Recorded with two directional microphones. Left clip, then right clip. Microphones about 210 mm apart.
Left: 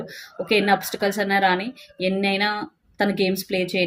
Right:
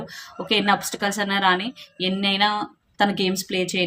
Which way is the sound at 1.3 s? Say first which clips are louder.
Right 1 dB; 20° right (ahead or behind).